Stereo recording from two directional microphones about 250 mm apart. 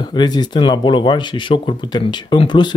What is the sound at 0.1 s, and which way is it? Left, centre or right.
Speech, centre.